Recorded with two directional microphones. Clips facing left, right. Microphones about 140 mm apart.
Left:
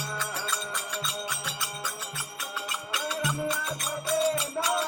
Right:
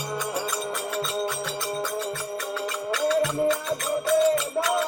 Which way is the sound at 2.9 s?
15° left (ahead or behind).